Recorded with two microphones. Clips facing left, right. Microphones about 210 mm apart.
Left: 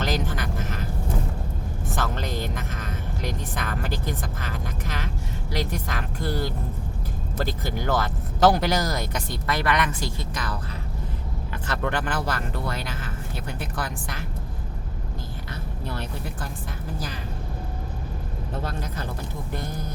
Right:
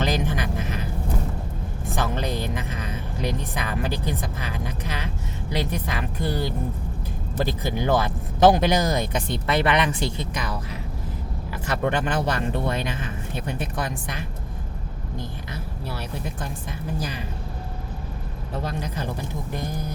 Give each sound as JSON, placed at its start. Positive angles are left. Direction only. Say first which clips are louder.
{"t": 0.0, "sound": "quack", "louder": "right 2 dB", "side_deg": -15}
{"t": 2.0, "sound": "music", "louder": "right 3 dB", "side_deg": -15}
{"t": 5.5, "sound": "speech", "louder": "right 2 dB", "side_deg": -15}
{"t": 18.6, "sound": "speech", "louder": "right 5 dB", "side_deg": -10}